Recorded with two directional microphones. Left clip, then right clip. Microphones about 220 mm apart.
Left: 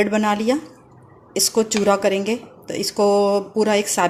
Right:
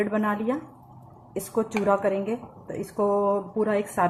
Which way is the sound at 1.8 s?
50° left (ahead or behind).